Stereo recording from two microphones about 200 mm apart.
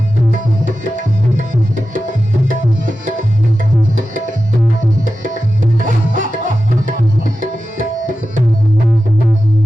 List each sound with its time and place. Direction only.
0.6 s tabla: 40° right (ahead or behind)
5.8 s music: 40° right (ahead or behind)
7.5 s tabla: 40° right (ahead or behind)